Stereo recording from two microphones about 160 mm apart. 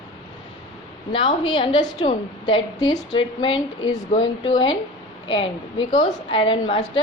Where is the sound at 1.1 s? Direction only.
30° left (ahead or behind).